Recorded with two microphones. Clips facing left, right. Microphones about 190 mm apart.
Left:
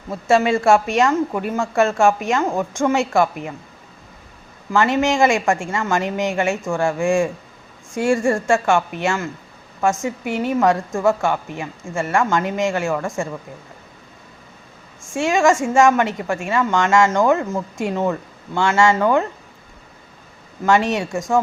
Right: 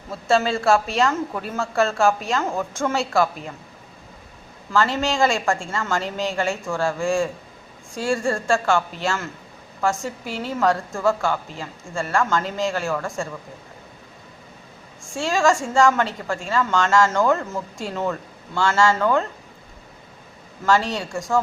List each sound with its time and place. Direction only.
0.3 s speech: 15° left (ahead or behind)
4.7 s a woman's voice: 20° left (ahead or behind)
15.1 s a woman's voice: 20° left (ahead or behind)
20.7 s a woman's voice: 20° left (ahead or behind)